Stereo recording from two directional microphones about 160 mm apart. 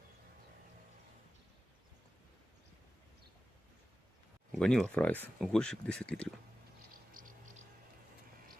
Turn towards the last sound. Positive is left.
turn(degrees=-55)  # may be behind; listen again after turning